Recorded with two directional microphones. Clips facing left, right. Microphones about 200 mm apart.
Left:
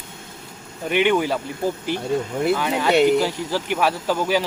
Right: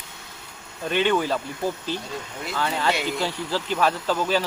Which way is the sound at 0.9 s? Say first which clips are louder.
Left 3 dB; 15° left (ahead or behind).